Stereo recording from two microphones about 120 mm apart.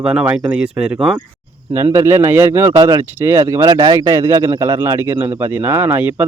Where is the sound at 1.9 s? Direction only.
20° right (ahead or behind).